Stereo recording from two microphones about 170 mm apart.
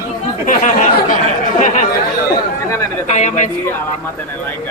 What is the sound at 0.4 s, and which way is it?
Chatter, 50° left (ahead or behind).